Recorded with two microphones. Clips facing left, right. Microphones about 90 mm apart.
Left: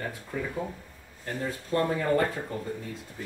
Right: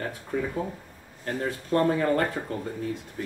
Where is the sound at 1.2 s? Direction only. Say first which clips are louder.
Right 3 dB; 45° right (ahead or behind).